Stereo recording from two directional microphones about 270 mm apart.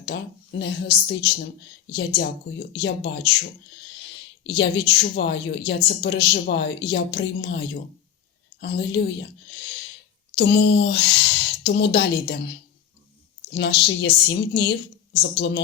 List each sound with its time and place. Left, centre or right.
0.1 s a woman's voice: left
4.5 s a woman's voice: left
8.6 s a woman's voice: left
10.3 s speech: left
13.5 s a woman's voice: left